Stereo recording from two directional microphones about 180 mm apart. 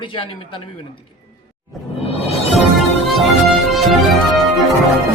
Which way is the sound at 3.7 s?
Centre (ahead or behind).